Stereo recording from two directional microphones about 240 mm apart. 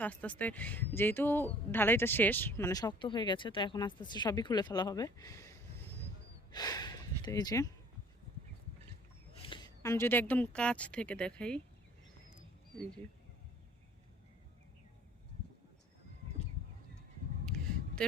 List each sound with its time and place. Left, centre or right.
0.0 s a woman's voice: centre
6.5 s a sound: centre
9.4 s a woman's voice: centre